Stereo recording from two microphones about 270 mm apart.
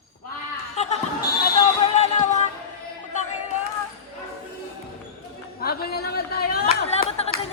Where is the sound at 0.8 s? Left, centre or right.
Left.